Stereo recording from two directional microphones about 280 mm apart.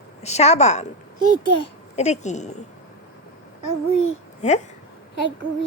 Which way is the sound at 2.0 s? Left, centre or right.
Left.